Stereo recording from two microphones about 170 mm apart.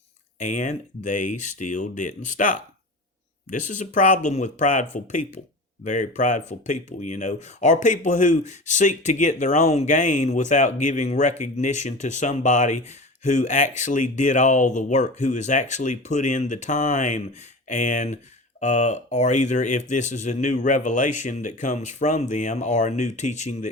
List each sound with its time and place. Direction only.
0.3 s speech: 45° left (ahead or behind)